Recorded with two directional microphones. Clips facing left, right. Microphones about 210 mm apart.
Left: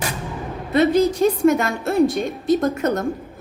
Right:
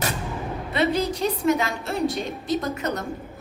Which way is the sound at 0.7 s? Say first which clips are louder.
Left 7 dB; 45° left (ahead or behind).